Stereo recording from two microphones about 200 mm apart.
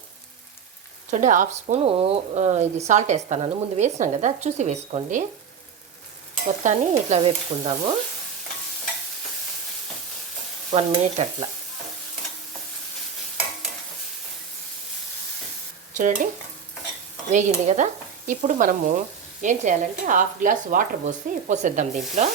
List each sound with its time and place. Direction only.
1.1 s speech: 40° right (ahead or behind)
6.6 s speech: 35° right (ahead or behind)
10.7 s speech: 35° right (ahead or behind)
16.0 s speech: 40° right (ahead or behind)
17.3 s speech: 40° right (ahead or behind)